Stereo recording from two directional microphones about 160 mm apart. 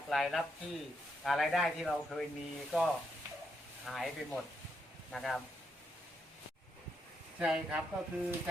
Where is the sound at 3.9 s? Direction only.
Centre (ahead or behind).